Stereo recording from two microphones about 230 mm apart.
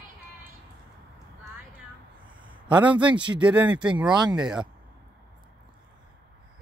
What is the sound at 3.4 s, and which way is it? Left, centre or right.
Speech, centre.